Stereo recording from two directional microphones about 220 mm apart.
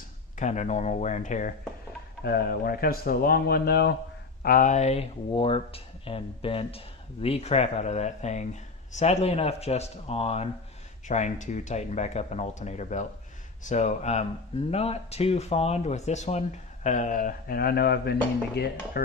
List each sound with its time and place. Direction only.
0.4 s speech: 30° left (ahead or behind)